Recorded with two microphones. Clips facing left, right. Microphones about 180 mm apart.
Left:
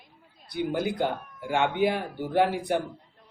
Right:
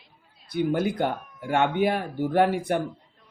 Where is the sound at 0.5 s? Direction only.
50° right (ahead or behind).